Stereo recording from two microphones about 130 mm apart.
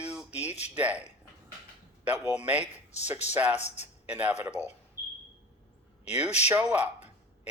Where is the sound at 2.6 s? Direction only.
60° left (ahead or behind).